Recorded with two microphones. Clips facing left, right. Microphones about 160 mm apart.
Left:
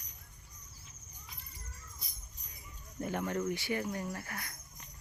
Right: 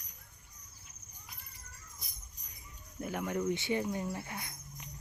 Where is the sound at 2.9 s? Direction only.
5° right (ahead or behind).